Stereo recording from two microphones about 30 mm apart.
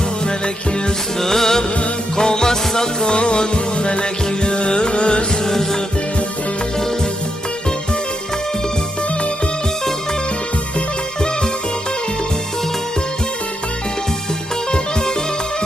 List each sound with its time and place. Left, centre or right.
1.2 s music: centre; by 5.2 s left